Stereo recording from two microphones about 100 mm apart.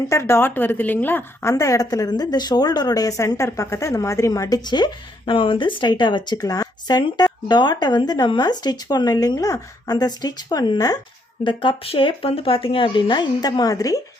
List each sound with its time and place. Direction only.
0.1 s a woman's voice: 25° left (ahead or behind)
1.5 s speech: 35° left (ahead or behind)
11.4 s speech: 55° left (ahead or behind); by 14.0 s 35° left (ahead or behind)